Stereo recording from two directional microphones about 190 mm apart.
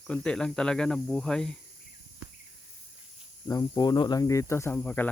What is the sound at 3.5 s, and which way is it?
Speech, 20° left (ahead or behind).